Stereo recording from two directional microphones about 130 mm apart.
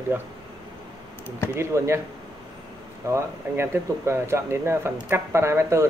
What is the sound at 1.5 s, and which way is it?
Speech, 20° right (ahead or behind).